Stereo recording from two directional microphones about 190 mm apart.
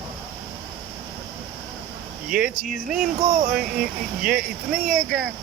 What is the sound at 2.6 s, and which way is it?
Speech, 45° right (ahead or behind).